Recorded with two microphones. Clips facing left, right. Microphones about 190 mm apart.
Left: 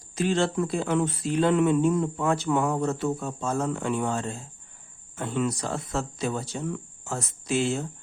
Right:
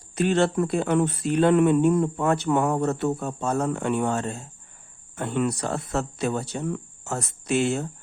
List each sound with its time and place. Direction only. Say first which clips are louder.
0.2 s speech: right 3 dB; 60° right (ahead or behind)